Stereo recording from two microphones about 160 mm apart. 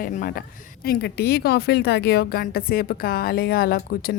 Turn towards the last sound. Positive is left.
turn(degrees=65)  # may be behind; listen again after turning